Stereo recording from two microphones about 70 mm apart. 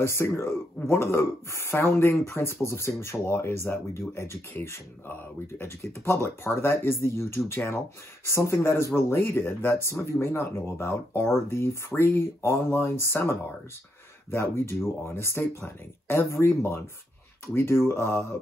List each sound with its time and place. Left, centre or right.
0.0 s speech: left